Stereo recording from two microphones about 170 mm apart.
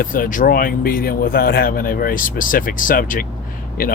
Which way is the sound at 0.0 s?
55° left (ahead or behind).